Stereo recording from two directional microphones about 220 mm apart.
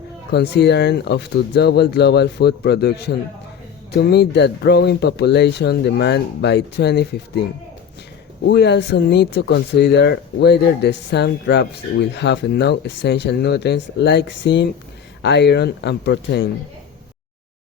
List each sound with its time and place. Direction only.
0.3 s speech: 50° left (ahead or behind)
8.4 s speech: 50° left (ahead or behind)